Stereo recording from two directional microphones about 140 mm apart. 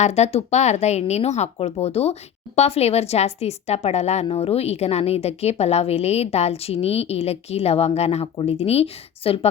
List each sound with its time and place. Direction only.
0.0 s speech: 50° left (ahead or behind)